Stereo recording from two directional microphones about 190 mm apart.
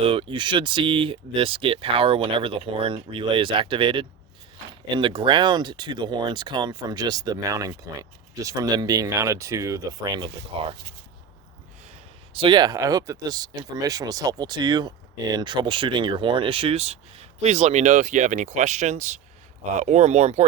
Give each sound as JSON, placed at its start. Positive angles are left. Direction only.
{"t": 0.0, "sound": "speech", "side_deg": -30}
{"t": 12.3, "sound": "speech", "side_deg": -25}